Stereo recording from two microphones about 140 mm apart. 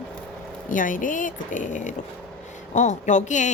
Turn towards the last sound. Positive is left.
turn(degrees=60)  # may be behind; listen again after turning